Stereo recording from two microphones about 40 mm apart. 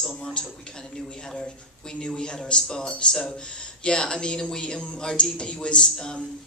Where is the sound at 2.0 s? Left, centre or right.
Left.